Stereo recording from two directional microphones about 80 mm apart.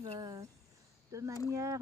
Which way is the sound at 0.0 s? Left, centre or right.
Right.